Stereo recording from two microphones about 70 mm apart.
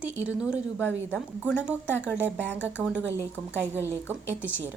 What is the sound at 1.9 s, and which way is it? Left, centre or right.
A woman's voice, right.